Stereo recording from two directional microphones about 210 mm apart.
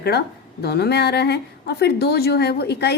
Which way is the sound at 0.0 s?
50° left (ahead or behind).